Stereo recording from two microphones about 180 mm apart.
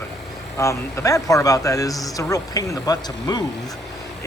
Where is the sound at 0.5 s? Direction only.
15° left (ahead or behind).